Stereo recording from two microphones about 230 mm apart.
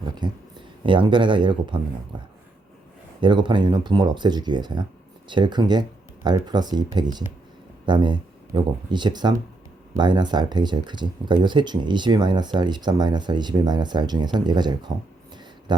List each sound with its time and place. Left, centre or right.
0.2 s speech: centre